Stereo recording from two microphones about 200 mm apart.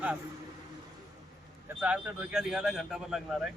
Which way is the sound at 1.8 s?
5° right (ahead or behind).